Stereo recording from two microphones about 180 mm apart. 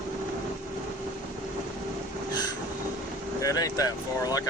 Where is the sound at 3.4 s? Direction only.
20° left (ahead or behind).